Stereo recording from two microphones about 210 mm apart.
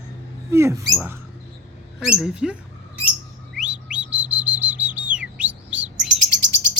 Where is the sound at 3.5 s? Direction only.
5° right (ahead or behind).